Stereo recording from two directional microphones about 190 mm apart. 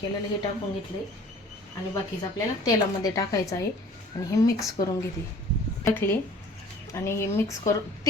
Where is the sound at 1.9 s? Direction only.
20° left (ahead or behind).